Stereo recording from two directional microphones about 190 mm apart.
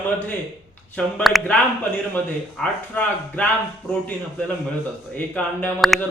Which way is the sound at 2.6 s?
5° left (ahead or behind).